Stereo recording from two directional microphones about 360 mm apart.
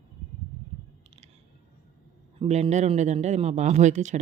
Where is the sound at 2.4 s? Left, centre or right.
Centre.